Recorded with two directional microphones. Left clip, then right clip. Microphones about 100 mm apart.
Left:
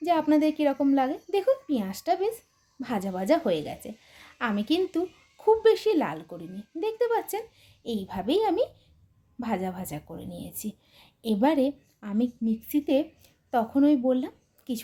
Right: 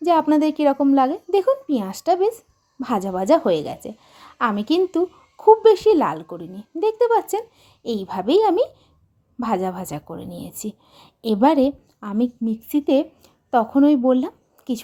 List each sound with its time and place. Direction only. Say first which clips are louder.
0.0 s a woman's voice: right 6 dB; 40° right (ahead or behind)